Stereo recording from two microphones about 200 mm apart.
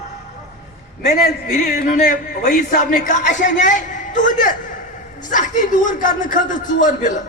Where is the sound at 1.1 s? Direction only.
40° left (ahead or behind).